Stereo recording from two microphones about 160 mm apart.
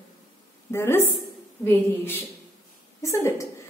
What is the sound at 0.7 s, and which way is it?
A woman's voice, 15° left (ahead or behind).